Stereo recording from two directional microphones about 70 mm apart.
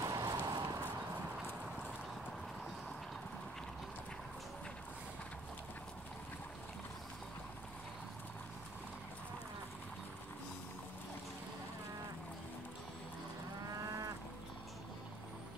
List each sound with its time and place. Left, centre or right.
0.0 s a sound: right
1.4 s clip-clop: centre
13.7 s cattle: right